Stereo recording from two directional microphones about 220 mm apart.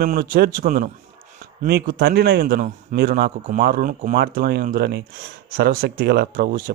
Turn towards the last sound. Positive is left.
turn(degrees=-45)  # may be behind; listen again after turning